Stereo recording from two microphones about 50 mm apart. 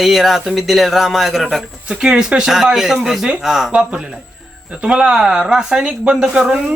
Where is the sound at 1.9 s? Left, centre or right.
Centre.